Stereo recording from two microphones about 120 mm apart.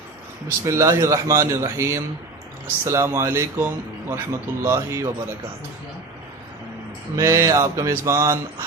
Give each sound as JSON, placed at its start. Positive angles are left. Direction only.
{"t": 0.6, "sound": "mantra", "side_deg": -25}
{"t": 7.2, "sound": "mantra", "side_deg": -25}